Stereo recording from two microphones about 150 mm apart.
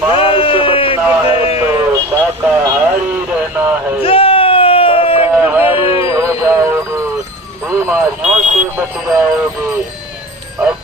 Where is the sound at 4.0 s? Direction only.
40° left (ahead or behind).